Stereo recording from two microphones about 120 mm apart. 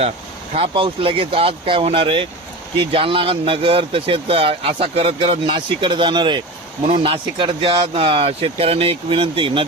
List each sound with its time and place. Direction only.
0.7 s speech: 45° right (ahead or behind)